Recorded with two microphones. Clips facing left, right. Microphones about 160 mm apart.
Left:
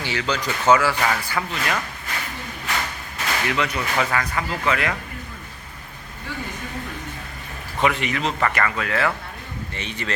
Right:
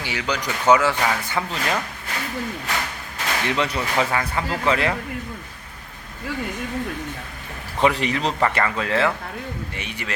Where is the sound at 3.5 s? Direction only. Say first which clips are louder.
Right 2 dB; 30° right (ahead or behind).